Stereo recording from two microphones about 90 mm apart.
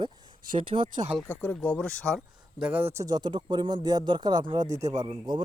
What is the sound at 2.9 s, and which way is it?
Speech, 40° right (ahead or behind).